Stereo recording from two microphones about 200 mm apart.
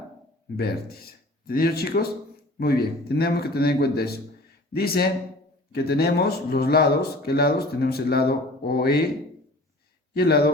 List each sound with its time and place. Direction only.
0.5 s speech: 50° left (ahead or behind)
10.2 s speech: 50° left (ahead or behind)